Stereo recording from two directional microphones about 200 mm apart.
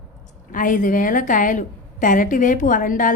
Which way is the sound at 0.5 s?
40° left (ahead or behind).